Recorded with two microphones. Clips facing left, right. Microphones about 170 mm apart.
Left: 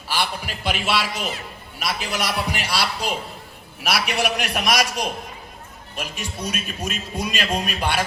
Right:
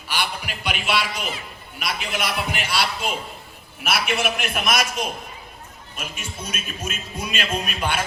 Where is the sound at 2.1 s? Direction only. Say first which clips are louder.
Left 1 dB; 35° left (ahead or behind).